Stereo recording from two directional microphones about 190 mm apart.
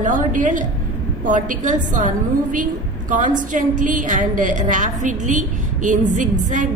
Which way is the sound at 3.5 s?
45° right (ahead or behind).